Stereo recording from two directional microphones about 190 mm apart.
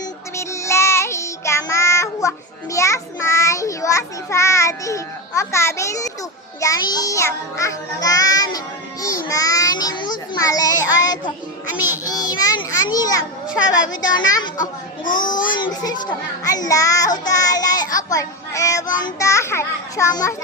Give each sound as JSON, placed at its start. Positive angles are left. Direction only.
{"t": 0.3, "sound": "child singing", "side_deg": 15}
{"t": 6.9, "sound": "music", "side_deg": 20}
{"t": 9.3, "sound": "a child's voice", "side_deg": 20}
{"t": 12.0, "sound": "music", "side_deg": 20}
{"t": 14.6, "sound": "a child's voice", "side_deg": 45}
{"t": 15.3, "sound": "music", "side_deg": 25}
{"t": 17.2, "sound": "speech", "side_deg": 20}